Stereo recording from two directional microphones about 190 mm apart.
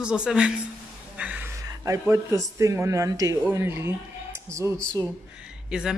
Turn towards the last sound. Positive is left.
turn(degrees=-5)  # may be behind; listen again after turning